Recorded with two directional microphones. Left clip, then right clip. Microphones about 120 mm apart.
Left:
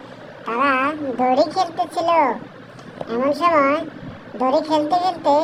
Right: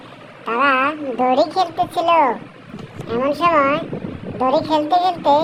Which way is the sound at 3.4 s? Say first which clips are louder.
Right 1 dB; 10° right (ahead or behind).